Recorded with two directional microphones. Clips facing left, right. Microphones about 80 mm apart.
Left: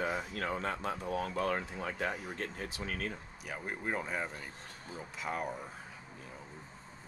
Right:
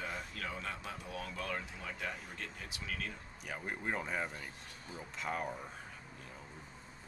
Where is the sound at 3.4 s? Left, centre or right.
Centre.